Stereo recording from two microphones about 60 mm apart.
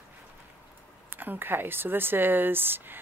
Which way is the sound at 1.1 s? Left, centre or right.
Right.